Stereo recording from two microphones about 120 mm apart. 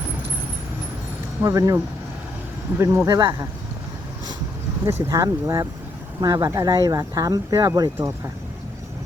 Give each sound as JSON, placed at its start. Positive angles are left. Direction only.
{"t": 1.4, "sound": "speech", "side_deg": -30}
{"t": 3.2, "sound": "speech", "side_deg": -35}
{"t": 4.9, "sound": "speech", "side_deg": -20}